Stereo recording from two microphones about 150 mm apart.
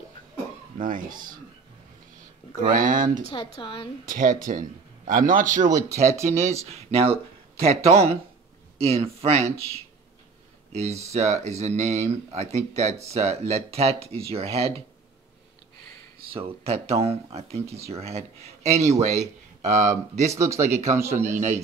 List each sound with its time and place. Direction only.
0.7 s a man's voice: 60° right (ahead or behind)
2.7 s a man's voice: 60° right (ahead or behind)
3.5 s a woman's voice: 35° left (ahead or behind)
4.0 s a man's voice: 65° right (ahead or behind)
5.7 s speech: 20° right (ahead or behind)
6.2 s speech: 45° right (ahead or behind)
16.3 s speech: 40° right (ahead or behind)
20.3 s speech: 20° right (ahead or behind)